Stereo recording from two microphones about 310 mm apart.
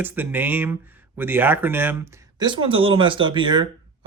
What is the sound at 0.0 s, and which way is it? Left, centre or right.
Speech, centre.